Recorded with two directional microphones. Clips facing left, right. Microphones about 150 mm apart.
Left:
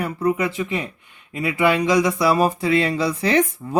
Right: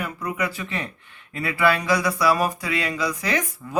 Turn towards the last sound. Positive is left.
turn(degrees=30)  # may be behind; listen again after turning